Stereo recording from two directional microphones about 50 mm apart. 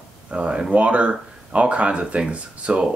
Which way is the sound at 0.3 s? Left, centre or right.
Right.